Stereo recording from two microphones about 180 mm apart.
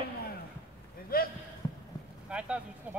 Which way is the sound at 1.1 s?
55° left (ahead or behind).